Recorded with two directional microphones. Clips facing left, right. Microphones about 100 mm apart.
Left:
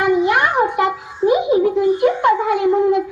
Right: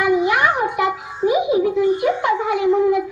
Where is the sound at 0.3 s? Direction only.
45° left (ahead or behind).